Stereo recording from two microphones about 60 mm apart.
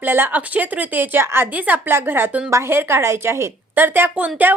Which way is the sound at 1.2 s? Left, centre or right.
Right.